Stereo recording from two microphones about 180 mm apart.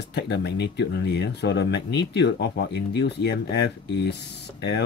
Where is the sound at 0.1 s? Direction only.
70° left (ahead or behind).